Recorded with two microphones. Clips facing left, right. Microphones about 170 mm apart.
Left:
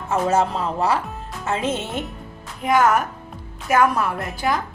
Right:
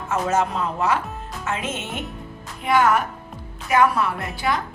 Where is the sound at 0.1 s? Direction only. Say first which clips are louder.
Left 2 dB; 30° left (ahead or behind).